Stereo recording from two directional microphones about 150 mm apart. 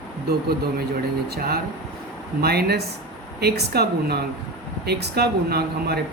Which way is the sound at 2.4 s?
90° right.